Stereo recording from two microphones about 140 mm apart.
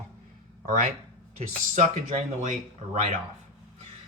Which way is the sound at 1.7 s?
55° right (ahead or behind).